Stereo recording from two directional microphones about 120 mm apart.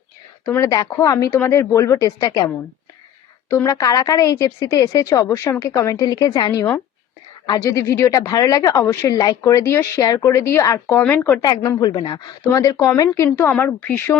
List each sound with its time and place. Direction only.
0.4 s speech: 25° left (ahead or behind)
3.5 s speech: 25° left (ahead or behind)
11.0 s speech: 15° left (ahead or behind)
11.4 s a woman's voice: 30° left (ahead or behind)
12.5 s speech: 25° left (ahead or behind)
13.4 s speech: 15° left (ahead or behind)